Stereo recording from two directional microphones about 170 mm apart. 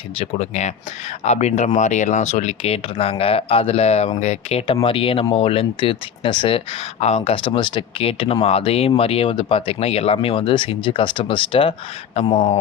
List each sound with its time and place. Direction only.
0.2 s speech: 40° left (ahead or behind)